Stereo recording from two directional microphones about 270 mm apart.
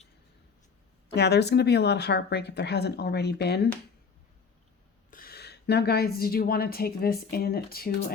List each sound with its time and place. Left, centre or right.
1.1 s a woman's voice: left
5.1 s a woman's voice: left